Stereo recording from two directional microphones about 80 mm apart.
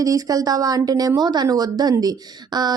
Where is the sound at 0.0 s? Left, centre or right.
Right.